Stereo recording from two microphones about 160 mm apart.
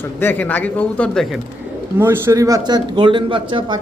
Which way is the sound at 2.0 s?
15° right (ahead or behind).